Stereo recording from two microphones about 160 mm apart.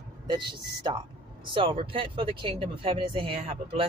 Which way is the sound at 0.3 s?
30° right (ahead or behind).